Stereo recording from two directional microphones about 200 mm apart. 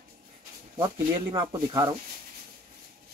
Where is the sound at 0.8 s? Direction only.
20° right (ahead or behind).